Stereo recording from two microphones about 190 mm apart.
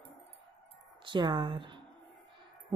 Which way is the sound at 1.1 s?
25° right (ahead or behind).